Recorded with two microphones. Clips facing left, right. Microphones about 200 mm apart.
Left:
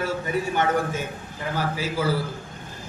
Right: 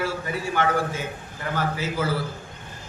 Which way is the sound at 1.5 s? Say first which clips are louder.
Even; 10° left (ahead or behind).